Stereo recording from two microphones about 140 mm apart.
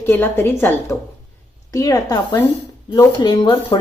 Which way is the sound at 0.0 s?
15° left (ahead or behind).